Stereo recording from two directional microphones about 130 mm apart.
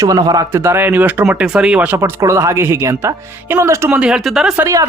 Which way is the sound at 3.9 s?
5° right (ahead or behind).